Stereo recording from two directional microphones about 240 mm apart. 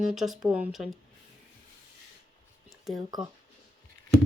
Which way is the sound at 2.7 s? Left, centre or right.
Centre.